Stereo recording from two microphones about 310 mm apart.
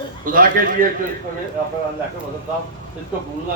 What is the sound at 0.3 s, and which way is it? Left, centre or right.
Speech, right.